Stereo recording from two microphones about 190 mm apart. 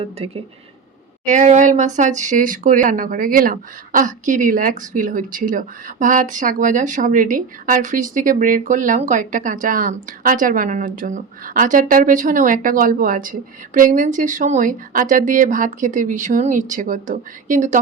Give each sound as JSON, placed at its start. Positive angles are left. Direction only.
{"t": 0.0, "sound": "speech", "side_deg": -30}
{"t": 1.2, "sound": "speech", "side_deg": -40}